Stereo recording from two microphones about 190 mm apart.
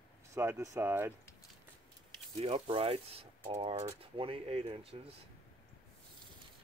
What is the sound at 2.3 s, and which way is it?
Speech, 30° right (ahead or behind).